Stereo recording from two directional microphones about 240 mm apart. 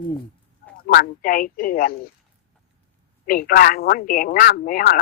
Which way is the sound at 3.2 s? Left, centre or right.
Left.